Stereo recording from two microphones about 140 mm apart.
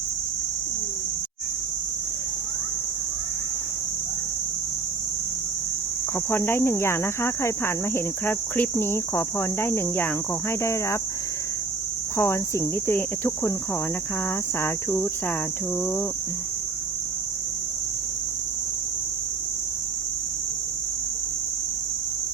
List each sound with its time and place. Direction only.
6.3 s speech: 15° left (ahead or behind)
12.1 s speech: 20° left (ahead or behind)
14.6 s speech: 15° left (ahead or behind)